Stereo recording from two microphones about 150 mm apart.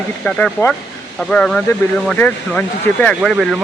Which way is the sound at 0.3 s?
5° left (ahead or behind).